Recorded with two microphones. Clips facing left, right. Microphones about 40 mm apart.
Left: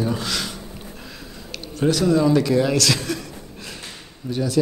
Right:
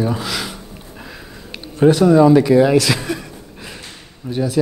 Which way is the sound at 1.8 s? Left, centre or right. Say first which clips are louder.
Right 7 dB; centre.